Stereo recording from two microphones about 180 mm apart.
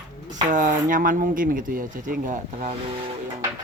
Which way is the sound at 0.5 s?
45° right (ahead or behind).